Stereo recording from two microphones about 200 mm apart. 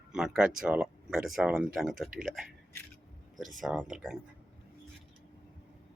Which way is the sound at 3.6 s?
5° right (ahead or behind).